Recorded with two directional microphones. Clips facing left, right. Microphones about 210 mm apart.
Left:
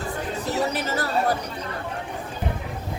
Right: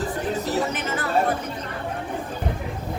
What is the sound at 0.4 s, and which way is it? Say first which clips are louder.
Speech: even; 35° left (ahead or behind).